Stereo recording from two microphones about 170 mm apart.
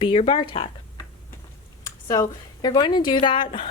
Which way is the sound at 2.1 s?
25° left (ahead or behind).